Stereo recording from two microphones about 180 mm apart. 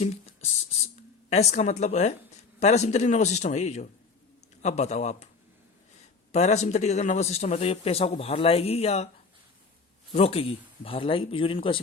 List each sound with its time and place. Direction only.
0.0 s a sound: 35° left (ahead or behind)
1.3 s a man's voice: 35° left (ahead or behind)
6.3 s a man's voice: 40° left (ahead or behind)
10.1 s a man's voice: 35° left (ahead or behind)